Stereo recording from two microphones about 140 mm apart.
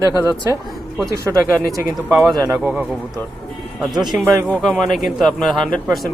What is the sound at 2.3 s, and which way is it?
Speech, 25° right (ahead or behind).